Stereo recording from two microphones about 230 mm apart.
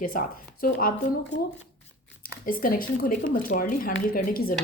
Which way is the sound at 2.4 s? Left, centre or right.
Left.